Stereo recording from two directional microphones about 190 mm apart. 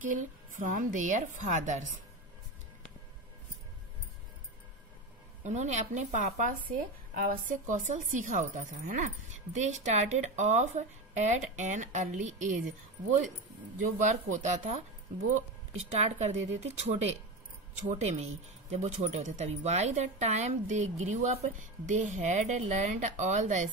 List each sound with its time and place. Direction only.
0.0 s a woman's voice: 45° right (ahead or behind)
5.4 s speech: 40° right (ahead or behind)
13.7 s speech: 40° right (ahead or behind)
15.9 s speech: 35° right (ahead or behind)